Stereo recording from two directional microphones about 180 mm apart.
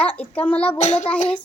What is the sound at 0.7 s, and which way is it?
Child singing, 40° left (ahead or behind).